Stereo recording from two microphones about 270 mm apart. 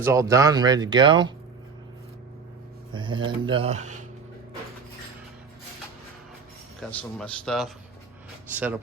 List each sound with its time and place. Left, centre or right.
0.0 s speech: centre
2.9 s a sound: centre
3.2 s speech: centre
6.9 s a man's voice: centre